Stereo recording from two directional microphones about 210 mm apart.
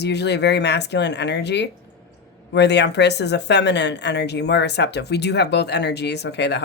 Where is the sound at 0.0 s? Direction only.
55° left (ahead or behind).